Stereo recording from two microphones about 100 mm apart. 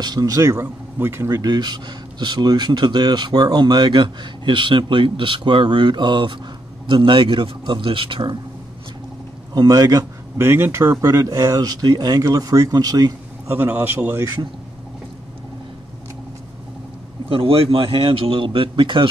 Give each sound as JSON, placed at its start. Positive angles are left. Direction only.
{"t": 0.0, "sound": "speech", "side_deg": -40}
{"t": 1.3, "sound": "a man's voice", "side_deg": -45}
{"t": 9.5, "sound": "speech", "side_deg": -40}
{"t": 10.3, "sound": "speech", "side_deg": -25}
{"t": 13.5, "sound": "speech", "side_deg": -20}
{"t": 17.3, "sound": "speech", "side_deg": -70}